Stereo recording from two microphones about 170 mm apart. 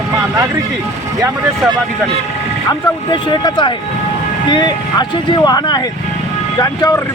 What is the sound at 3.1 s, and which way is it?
Speech, 25° left (ahead or behind).